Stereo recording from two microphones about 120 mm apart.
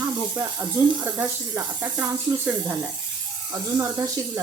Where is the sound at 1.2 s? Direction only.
20° right (ahead or behind).